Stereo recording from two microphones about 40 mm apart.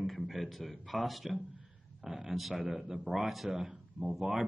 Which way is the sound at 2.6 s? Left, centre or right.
Right.